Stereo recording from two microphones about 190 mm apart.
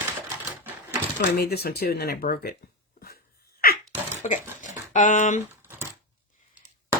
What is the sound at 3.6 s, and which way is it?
Sneeze, 50° left (ahead or behind).